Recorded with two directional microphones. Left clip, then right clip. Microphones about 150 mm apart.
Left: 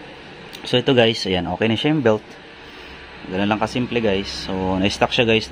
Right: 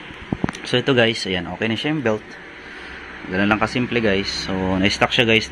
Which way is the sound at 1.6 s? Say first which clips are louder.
Left 4 dB; 60° left (ahead or behind).